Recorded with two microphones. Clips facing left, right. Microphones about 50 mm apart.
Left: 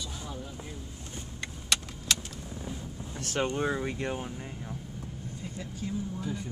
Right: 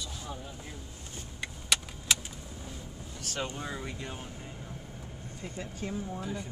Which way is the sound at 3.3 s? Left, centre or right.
Left.